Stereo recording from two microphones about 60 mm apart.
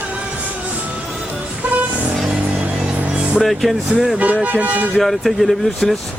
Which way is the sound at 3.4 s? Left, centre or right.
Centre.